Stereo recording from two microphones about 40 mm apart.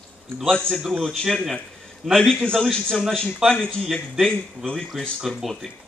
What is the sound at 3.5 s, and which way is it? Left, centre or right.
Speech, left.